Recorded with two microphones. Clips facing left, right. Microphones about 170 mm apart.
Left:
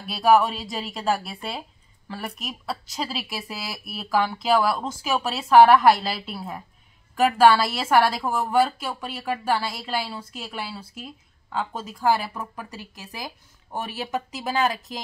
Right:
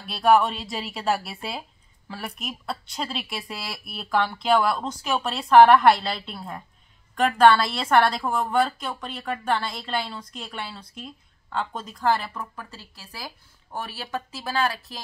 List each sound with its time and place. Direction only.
0.0 s a woman's voice: 5° left (ahead or behind); by 15.0 s 20° left (ahead or behind)